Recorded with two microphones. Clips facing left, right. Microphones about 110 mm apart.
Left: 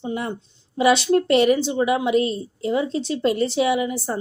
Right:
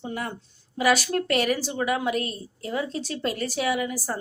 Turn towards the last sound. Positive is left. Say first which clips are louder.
# left 5 dB
turn(degrees=25)  # may be behind; listen again after turning